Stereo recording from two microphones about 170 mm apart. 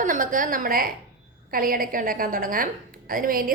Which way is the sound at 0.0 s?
50° right (ahead or behind).